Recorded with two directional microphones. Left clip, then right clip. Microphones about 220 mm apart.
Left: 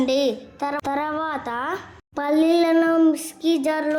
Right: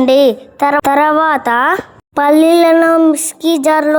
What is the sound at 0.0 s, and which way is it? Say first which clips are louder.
A woman's voice: right 12 dB; 30° right (ahead or behind).